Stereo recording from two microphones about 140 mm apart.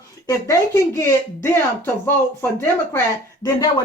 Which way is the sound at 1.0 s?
20° left (ahead or behind).